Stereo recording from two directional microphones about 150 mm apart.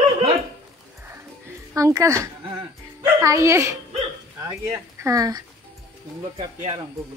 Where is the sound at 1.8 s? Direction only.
20° right (ahead or behind).